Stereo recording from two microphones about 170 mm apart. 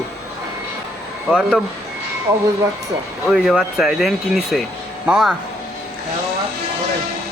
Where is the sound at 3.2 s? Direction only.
5° right (ahead or behind).